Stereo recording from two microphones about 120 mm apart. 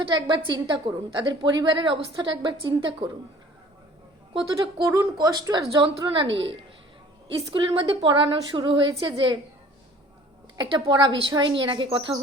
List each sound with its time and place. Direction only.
0.0 s a woman's voice: 40° right (ahead or behind)
4.4 s a woman's voice: 40° right (ahead or behind)
4.9 s a woman's voice: 30° right (ahead or behind)
6.1 s a woman's voice: 45° right (ahead or behind)
10.6 s a woman's voice: 40° right (ahead or behind)